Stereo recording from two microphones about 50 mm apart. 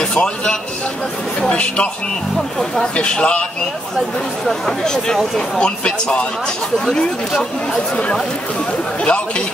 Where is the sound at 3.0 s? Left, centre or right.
Left.